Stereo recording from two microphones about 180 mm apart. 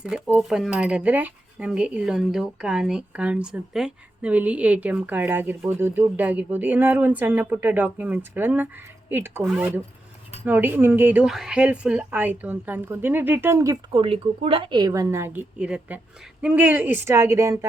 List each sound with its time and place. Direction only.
0.0 s speech: 5° right (ahead or behind)
13.9 s speech: 30° right (ahead or behind)